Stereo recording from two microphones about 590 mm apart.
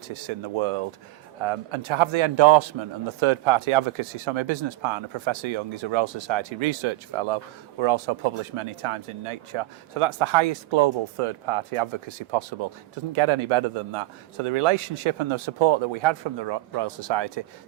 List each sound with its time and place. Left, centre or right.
0.1 s speech: right